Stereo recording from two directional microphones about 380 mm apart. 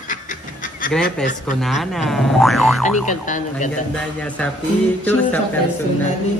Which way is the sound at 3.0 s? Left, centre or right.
Centre.